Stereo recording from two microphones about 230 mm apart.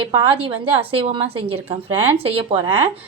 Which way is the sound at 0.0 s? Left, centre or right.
Right.